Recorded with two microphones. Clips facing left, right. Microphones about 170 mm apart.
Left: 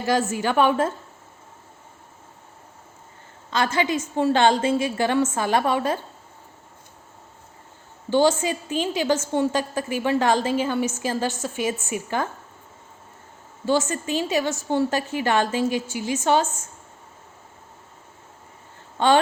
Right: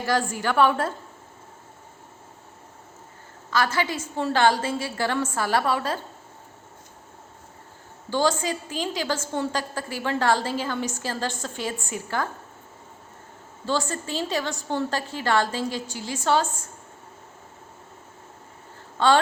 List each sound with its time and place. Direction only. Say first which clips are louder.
0.0 s a woman's voice: left 3 dB; 20° left (ahead or behind)
3.5 s a woman's voice: left 2 dB; 20° left (ahead or behind)
8.1 s a woman's voice: left 4 dB; 20° left (ahead or behind)
13.7 s a woman's voice: left 5 dB; 15° left (ahead or behind)
18.9 s speech: left 1 dB; 15° left (ahead or behind)